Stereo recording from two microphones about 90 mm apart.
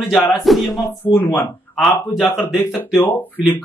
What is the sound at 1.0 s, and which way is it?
Speech, 25° left (ahead or behind).